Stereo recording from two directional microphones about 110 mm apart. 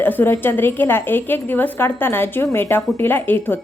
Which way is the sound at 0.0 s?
20° left (ahead or behind).